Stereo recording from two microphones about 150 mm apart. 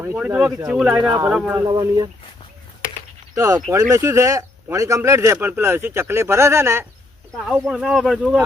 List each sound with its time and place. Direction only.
0.2 s speech: 10° right (ahead or behind)
1.6 s speech: 30° right (ahead or behind)
3.3 s speech: 20° right (ahead or behind)
7.3 s speech: centre (ahead or behind)